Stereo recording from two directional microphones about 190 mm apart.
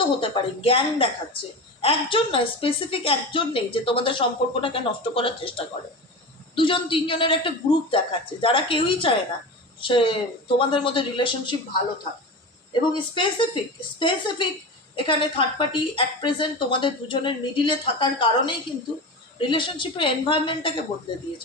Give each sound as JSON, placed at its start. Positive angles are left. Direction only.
{"t": 0.0, "sound": "a woman's voice", "side_deg": 30}
{"t": 12.9, "sound": "a woman's voice", "side_deg": 25}